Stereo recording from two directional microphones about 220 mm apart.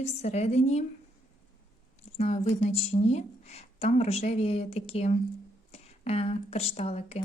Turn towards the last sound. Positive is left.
turn(degrees=30)  # may be behind; listen again after turning